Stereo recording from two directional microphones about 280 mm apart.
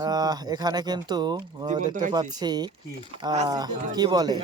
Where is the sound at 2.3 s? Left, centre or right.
Centre.